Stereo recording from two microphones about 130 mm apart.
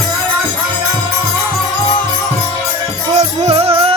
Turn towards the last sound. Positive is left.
turn(degrees=-50)  # may be behind; listen again after turning